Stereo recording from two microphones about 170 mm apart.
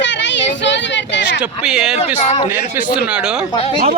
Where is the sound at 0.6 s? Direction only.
90° left.